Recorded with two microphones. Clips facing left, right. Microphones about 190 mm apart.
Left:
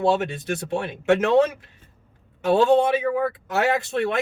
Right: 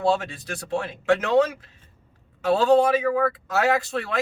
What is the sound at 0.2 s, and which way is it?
Speech, 20° left (ahead or behind).